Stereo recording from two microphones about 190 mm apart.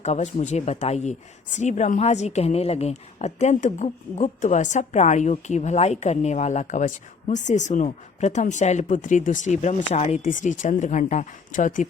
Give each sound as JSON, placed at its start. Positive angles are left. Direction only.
{"t": 0.0, "sound": "speech", "side_deg": 35}